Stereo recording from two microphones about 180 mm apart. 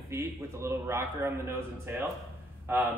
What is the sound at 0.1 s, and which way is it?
A man's voice, 15° right (ahead or behind).